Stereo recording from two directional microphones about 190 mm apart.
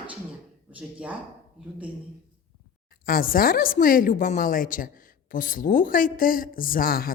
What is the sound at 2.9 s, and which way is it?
Speech, 50° left (ahead or behind).